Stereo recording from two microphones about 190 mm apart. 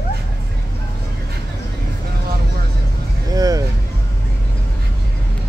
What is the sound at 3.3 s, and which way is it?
Vehicle, 20° right (ahead or behind).